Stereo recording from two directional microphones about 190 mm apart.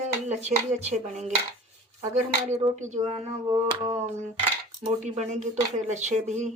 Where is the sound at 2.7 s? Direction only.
40° right (ahead or behind).